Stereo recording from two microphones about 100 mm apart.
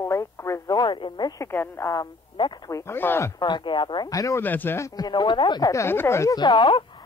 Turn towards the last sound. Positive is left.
turn(degrees=55)  # may be behind; listen again after turning